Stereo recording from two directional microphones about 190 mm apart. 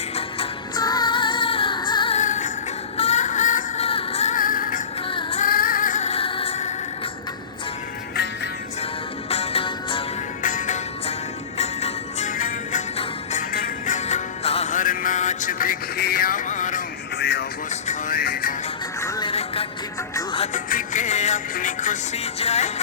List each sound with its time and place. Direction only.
0.2 s music: 25° left (ahead or behind)
2.1 s music: 40° left (ahead or behind)
5.0 s music: 30° left (ahead or behind)
5.5 s music: 50° left (ahead or behind); by 6.7 s 35° left (ahead or behind)
9.3 s music: 30° left (ahead or behind)
10.4 s music: 40° left (ahead or behind)
13.8 s music: 40° left (ahead or behind)
17.2 s music: 60° left (ahead or behind)
17.7 s vehicle: 35° left (ahead or behind)
18.2 s music: 50° left (ahead or behind)
19.0 s music: 20° left (ahead or behind)
19.3 s music: 30° left (ahead or behind)
20.7 s music: 45° left (ahead or behind)